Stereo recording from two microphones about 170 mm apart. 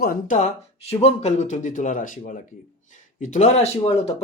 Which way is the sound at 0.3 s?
40° left (ahead or behind).